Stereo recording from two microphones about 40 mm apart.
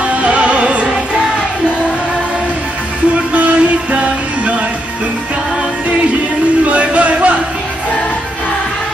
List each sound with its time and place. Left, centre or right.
0.0 s music: right
3.3 s music: right
6.6 s music: right